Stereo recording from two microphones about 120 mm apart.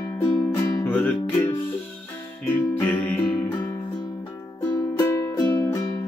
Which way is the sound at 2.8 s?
15° left (ahead or behind).